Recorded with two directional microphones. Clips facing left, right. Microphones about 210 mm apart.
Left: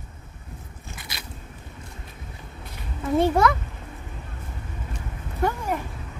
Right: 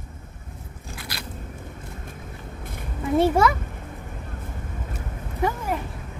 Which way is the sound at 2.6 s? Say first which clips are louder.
Right 4 dB; 50° right (ahead or behind).